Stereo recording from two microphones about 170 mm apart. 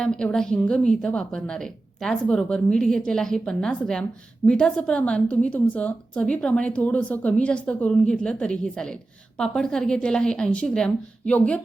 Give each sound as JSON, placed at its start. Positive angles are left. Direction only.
{"t": 0.0, "sound": "speech", "side_deg": 5}